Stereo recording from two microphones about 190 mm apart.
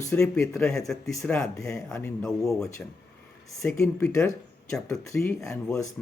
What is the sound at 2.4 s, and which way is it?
Speech, centre (ahead or behind).